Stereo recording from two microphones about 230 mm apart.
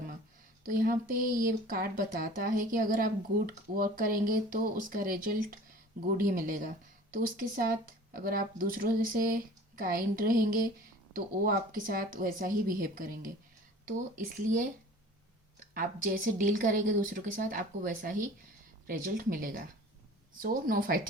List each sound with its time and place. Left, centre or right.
0.7 s speech: right
15.7 s speech: right